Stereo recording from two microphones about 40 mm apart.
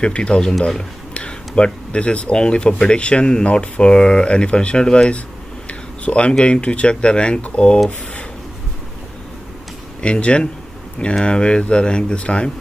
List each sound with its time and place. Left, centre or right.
0.0 s speech: left
5.7 s a sound: left
6.4 s speech: left
10.0 s speech: left